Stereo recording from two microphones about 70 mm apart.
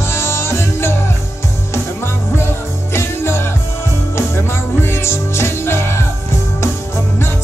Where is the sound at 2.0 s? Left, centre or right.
Left.